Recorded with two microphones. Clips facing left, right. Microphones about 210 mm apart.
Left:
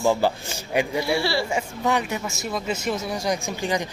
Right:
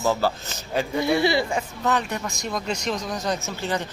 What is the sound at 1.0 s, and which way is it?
Speech, 20° right (ahead or behind).